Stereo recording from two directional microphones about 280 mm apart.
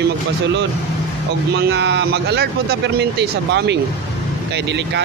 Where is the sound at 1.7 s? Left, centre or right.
Right.